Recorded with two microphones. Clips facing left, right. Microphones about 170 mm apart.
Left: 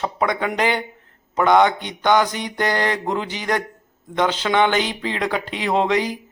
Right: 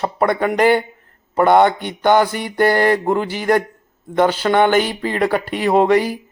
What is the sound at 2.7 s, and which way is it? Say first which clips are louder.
Speech: right 7 dB; 50° right (ahead or behind).